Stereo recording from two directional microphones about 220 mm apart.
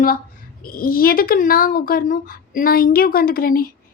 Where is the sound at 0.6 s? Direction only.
40° left (ahead or behind).